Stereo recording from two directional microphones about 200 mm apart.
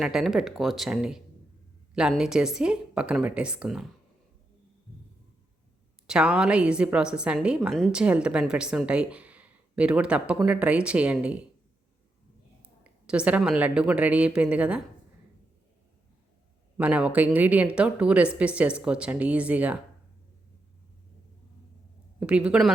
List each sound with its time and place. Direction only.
0.0 s a woman's voice: centre (ahead or behind)
6.1 s a woman's voice: 5° right (ahead or behind)
12.8 s speech: 5° right (ahead or behind)
16.7 s speech: 5° right (ahead or behind)
22.2 s a woman's voice: 5° right (ahead or behind)